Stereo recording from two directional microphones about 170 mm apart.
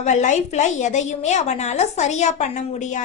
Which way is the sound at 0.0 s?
45° left (ahead or behind).